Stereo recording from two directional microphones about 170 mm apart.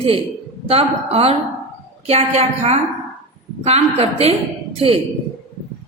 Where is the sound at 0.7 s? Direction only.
35° right (ahead or behind).